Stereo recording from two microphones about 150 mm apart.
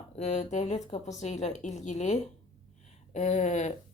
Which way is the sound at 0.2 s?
50° left (ahead or behind).